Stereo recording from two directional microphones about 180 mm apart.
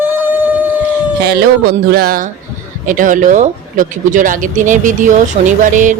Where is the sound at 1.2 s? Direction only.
65° right (ahead or behind).